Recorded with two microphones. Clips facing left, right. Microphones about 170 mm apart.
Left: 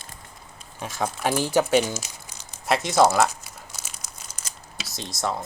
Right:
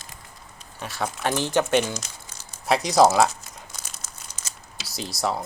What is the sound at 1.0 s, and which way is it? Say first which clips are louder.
Speech: left 1 dB; 10° left (ahead or behind).